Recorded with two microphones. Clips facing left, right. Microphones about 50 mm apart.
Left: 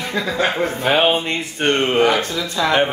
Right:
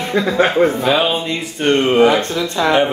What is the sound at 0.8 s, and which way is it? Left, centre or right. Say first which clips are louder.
Music: even; left.